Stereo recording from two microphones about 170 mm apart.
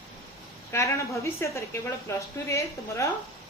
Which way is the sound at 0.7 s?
15° left (ahead or behind).